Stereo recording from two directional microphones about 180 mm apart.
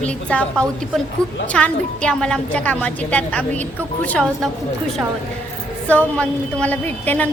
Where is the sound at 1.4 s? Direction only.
5° left (ahead or behind).